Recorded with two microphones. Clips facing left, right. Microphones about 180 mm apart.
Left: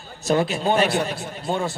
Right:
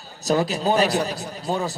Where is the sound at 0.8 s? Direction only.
40° right (ahead or behind).